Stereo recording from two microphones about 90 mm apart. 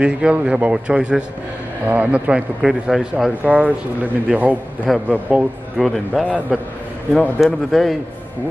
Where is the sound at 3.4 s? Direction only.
15° right (ahead or behind).